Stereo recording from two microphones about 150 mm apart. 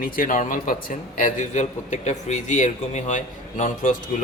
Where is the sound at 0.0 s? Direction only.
65° left (ahead or behind).